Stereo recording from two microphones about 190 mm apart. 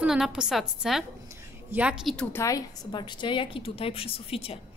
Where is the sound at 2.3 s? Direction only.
15° left (ahead or behind).